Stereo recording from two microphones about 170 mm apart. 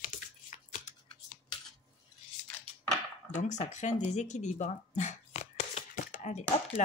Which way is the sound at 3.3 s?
45° left (ahead or behind).